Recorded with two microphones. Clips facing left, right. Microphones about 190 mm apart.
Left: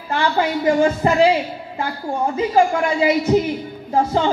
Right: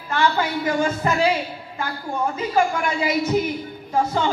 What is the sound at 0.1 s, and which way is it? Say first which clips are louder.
Speech: left 2 dB; 25° left (ahead or behind).